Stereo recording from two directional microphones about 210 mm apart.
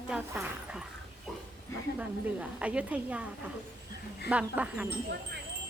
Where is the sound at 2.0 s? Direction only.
5° right (ahead or behind).